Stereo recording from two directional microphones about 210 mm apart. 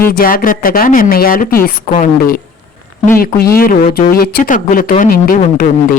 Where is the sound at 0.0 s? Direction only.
45° left (ahead or behind).